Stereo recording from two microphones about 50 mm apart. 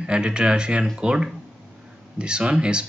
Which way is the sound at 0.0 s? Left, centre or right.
Centre.